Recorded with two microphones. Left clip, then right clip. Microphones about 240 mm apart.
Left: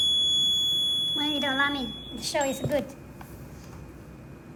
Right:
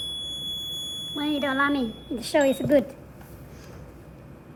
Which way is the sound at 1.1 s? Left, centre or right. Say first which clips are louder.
Even; centre.